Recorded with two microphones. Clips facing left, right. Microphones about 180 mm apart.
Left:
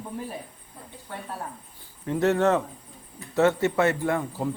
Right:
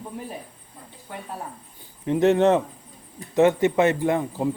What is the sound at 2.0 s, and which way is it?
A man's voice, 20° right (ahead or behind).